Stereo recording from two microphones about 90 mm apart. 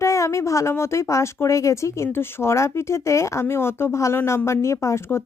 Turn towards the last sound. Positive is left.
turn(degrees=35)  # may be behind; listen again after turning